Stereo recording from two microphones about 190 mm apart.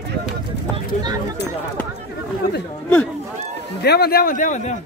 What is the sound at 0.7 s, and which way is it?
Speech, 25° right (ahead or behind).